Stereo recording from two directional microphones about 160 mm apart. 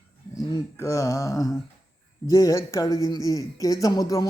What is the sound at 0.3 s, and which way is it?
A man's voice, 25° left (ahead or behind).